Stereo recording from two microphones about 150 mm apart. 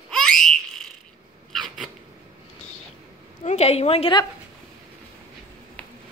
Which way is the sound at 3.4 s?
45° left (ahead or behind).